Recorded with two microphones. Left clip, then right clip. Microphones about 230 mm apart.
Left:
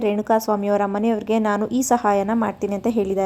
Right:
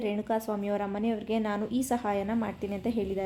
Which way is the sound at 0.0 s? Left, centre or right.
Left.